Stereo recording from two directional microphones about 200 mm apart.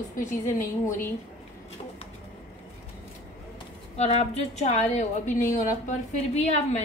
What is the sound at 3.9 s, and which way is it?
A woman's voice, 30° left (ahead or behind).